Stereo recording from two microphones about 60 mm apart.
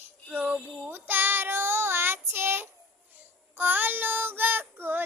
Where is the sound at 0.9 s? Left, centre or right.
Right.